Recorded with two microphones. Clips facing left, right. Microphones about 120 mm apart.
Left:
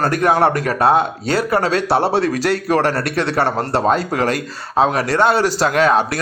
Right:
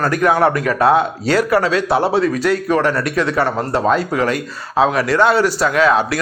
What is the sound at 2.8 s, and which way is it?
A man's voice, 30° left (ahead or behind).